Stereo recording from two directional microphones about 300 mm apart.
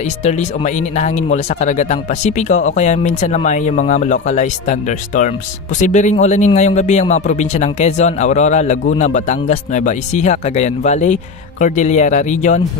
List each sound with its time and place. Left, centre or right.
0.2 s speech: left